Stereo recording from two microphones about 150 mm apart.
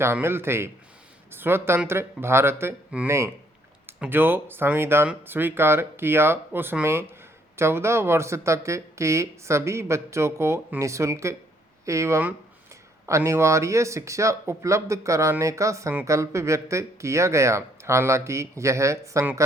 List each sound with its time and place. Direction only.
0.0 s speech: 15° right (ahead or behind)